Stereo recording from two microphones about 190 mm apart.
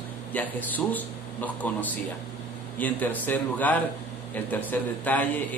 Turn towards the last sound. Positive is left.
turn(degrees=10)  # may be behind; listen again after turning